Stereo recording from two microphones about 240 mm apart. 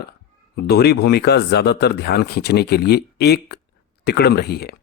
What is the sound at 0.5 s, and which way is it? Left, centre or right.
Speech, left.